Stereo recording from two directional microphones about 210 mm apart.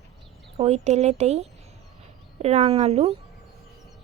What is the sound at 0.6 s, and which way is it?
Speech, 30° right (ahead or behind).